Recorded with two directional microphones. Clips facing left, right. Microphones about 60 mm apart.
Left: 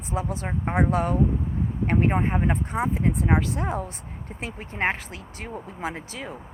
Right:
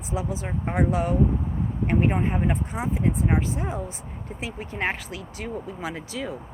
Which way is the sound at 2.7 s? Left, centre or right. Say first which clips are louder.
Left 1 dB; left.